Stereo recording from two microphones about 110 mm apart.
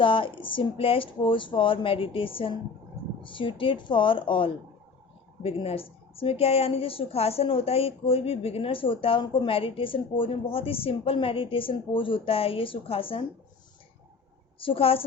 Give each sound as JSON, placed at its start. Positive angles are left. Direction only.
{"t": 0.0, "sound": "a woman's voice", "side_deg": 50}
{"t": 14.6, "sound": "a woman's voice", "side_deg": 55}